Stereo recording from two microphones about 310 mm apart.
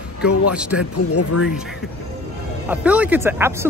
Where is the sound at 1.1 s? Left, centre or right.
Left.